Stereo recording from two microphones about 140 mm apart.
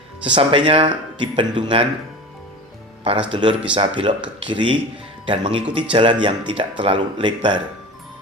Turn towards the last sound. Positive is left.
turn(degrees=-35)  # may be behind; listen again after turning